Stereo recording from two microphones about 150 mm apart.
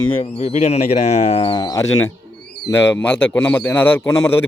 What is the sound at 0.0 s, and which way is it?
Speech, 35° left (ahead or behind).